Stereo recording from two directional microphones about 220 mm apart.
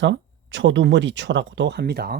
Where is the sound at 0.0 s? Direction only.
55° right (ahead or behind).